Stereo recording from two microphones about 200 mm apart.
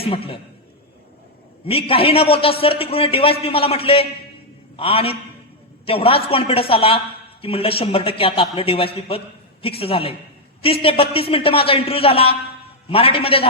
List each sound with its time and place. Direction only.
0.0 s a man's voice: 30° left (ahead or behind)
1.6 s a man's voice: 30° left (ahead or behind)